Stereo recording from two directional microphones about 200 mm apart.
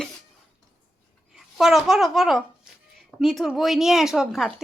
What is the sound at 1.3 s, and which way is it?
A child's voice, centre (ahead or behind).